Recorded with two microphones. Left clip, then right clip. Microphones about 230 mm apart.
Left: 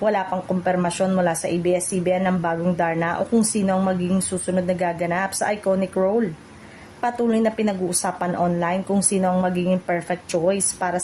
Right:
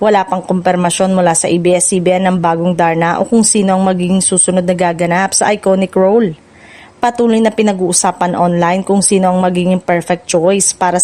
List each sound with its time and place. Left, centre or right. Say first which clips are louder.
0.0 s speech: right 10 dB; right